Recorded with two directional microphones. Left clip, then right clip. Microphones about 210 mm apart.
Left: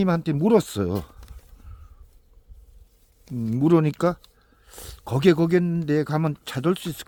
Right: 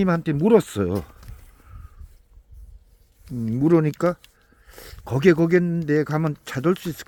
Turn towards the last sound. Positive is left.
turn(degrees=-10)  # may be behind; listen again after turning